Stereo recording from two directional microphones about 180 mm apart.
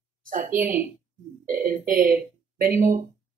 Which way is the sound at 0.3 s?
45° right (ahead or behind).